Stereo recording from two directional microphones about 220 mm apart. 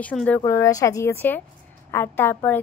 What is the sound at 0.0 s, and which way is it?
A child's voice, 5° left (ahead or behind).